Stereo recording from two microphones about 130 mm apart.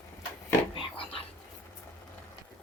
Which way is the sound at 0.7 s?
45° left (ahead or behind).